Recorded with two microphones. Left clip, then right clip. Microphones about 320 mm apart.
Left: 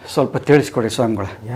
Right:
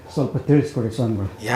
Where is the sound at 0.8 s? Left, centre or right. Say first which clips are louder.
Left 7 dB; centre.